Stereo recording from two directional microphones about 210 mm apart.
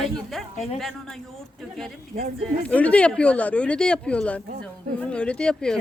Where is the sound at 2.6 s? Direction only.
5° left (ahead or behind).